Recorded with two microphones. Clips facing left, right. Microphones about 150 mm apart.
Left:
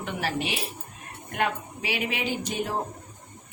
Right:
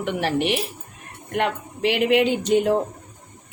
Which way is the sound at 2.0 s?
65° right (ahead or behind).